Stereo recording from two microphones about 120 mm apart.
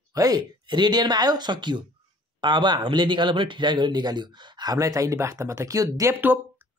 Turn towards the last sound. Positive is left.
turn(degrees=-25)  # may be behind; listen again after turning